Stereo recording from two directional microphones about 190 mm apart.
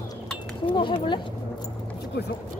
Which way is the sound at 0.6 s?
25° left (ahead or behind).